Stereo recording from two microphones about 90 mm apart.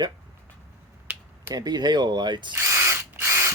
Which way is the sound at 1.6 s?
50° right (ahead or behind).